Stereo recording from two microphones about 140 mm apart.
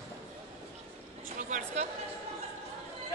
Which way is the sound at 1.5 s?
60° right (ahead or behind).